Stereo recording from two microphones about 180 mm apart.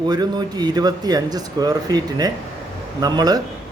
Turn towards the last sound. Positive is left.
turn(degrees=-20)  # may be behind; listen again after turning